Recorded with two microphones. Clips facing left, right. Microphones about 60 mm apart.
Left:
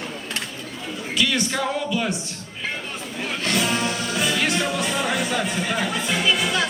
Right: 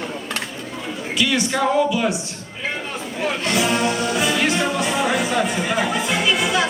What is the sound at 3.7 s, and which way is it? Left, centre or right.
Music, right.